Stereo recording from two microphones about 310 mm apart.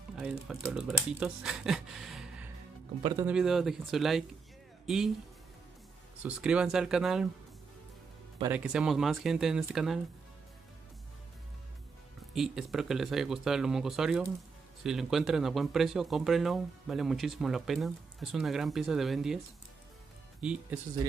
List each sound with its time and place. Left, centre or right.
0.1 s speech: centre
6.2 s speech: centre
8.4 s speech: centre
12.4 s speech: centre